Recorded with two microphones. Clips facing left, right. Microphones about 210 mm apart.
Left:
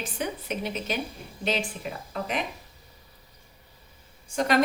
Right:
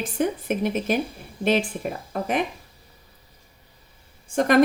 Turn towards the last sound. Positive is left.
turn(degrees=-55)  # may be behind; listen again after turning